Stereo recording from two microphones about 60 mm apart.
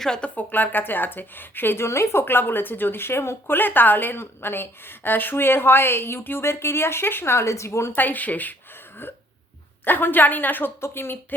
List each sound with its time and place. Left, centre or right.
0.2 s speech: left
2.2 s speech: left
7.9 s speech: left
9.8 s speech: left
10.8 s speech: left